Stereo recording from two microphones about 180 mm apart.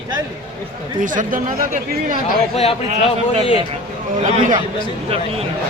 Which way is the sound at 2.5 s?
35° left (ahead or behind).